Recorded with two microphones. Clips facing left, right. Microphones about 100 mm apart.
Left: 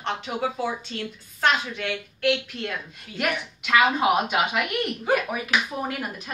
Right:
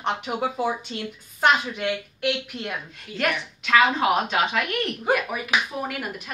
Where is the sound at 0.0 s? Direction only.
15° right (ahead or behind).